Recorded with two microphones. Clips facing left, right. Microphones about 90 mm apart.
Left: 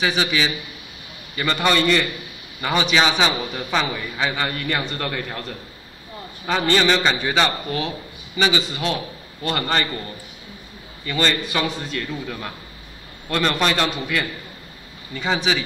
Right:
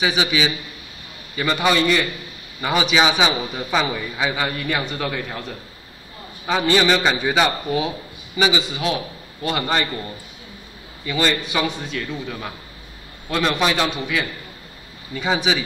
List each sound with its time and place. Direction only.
0.0 s a man's voice: 5° right (ahead or behind)